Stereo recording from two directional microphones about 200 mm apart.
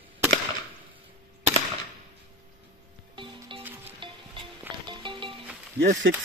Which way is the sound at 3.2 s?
25° right (ahead or behind).